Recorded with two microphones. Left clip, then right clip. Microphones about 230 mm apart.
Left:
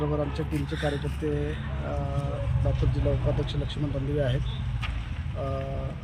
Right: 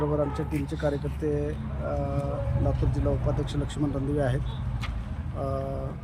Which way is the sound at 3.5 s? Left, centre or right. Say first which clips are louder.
Right 2 dB; centre.